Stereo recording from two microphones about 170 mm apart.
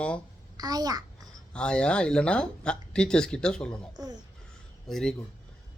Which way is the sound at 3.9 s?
25° right (ahead or behind).